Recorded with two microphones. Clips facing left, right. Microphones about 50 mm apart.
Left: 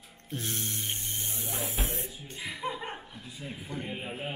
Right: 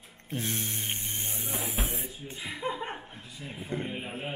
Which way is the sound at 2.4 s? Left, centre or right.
Right.